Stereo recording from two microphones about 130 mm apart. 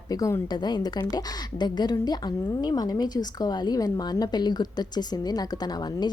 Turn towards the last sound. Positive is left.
turn(degrees=30)  # may be behind; listen again after turning